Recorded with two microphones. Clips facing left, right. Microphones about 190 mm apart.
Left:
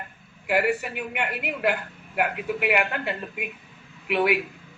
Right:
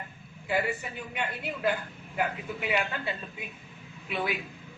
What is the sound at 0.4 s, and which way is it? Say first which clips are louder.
A man's voice: left 6 dB; 75° left (ahead or behind).